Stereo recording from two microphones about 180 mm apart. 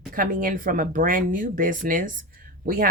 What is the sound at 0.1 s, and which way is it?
Speech, 50° right (ahead or behind).